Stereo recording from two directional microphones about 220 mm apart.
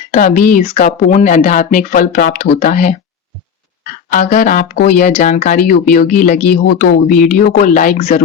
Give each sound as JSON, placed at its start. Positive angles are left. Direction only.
{"t": 0.1, "sound": "speech", "side_deg": 35}
{"t": 4.1, "sound": "speech", "side_deg": 35}